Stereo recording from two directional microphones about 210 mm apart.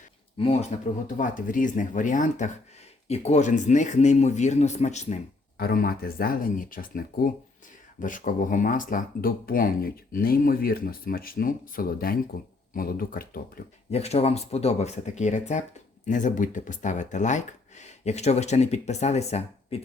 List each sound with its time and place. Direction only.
0.3 s speech: 25° left (ahead or behind)
1.1 s speech: 40° left (ahead or behind)
5.6 s speech: 45° left (ahead or behind)
13.9 s speech: 30° left (ahead or behind)